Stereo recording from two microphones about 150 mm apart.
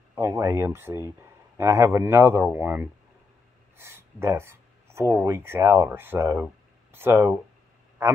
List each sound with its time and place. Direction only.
0.1 s speech: 20° right (ahead or behind)